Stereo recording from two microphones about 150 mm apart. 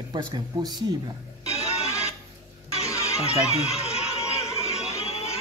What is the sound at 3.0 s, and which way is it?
Chatter, 45° left (ahead or behind).